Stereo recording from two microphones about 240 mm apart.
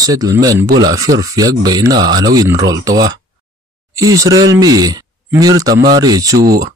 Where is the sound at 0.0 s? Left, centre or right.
Centre.